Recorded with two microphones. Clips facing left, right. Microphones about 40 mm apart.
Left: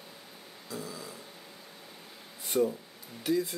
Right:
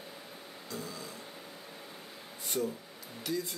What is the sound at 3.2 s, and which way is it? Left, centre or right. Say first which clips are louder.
Speech: left 6 dB; centre.